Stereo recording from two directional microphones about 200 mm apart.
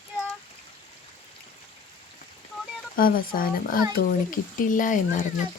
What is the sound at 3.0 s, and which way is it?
Speech, 45° left (ahead or behind).